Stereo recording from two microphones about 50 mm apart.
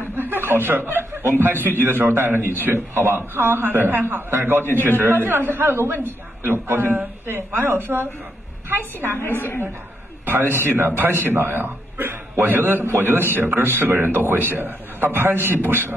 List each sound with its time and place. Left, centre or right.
0.0 s a man's voice: right
9.2 s a woman's voice: left
10.2 s a man's voice: right